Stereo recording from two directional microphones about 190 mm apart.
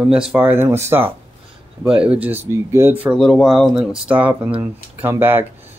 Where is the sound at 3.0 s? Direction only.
Centre (ahead or behind).